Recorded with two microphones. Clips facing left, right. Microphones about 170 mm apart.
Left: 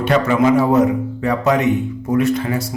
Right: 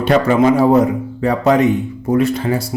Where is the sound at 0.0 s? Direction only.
35° right (ahead or behind).